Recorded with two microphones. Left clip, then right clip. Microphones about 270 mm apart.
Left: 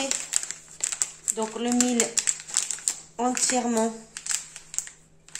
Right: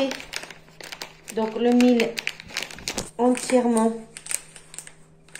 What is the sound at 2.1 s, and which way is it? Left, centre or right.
Crumpling, centre.